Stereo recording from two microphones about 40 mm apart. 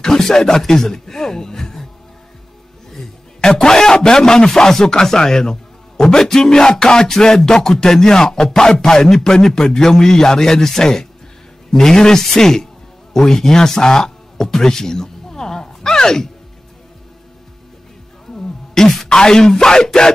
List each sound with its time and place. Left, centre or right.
0.0 s speech: centre
3.3 s a man's voice: centre
18.3 s speech: centre